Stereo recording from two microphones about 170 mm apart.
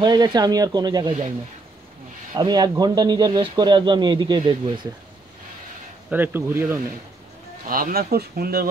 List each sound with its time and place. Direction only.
0.0 s speech: 25° right (ahead or behind)
2.3 s speech: 25° right (ahead or behind)
6.0 s speech: 10° right (ahead or behind)
7.6 s speech: 60° right (ahead or behind)